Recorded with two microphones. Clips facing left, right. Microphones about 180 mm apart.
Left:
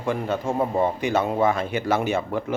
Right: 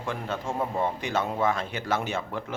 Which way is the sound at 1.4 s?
5° left (ahead or behind).